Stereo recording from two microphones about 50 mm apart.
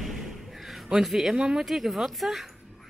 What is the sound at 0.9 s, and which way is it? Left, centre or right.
Speech, centre.